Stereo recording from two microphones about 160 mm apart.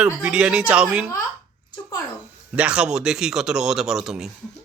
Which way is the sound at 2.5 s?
5° right (ahead or behind).